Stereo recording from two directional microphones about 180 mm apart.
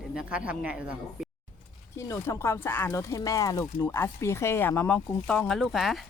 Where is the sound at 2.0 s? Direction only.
15° left (ahead or behind); by 6.0 s centre (ahead or behind).